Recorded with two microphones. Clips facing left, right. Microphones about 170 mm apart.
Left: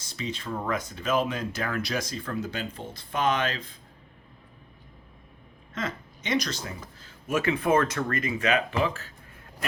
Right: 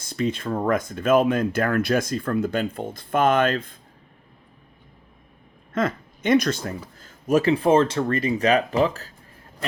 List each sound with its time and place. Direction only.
0.0 s speech: 55° right (ahead or behind)
5.7 s speech: 55° right (ahead or behind); by 9.1 s 40° right (ahead or behind)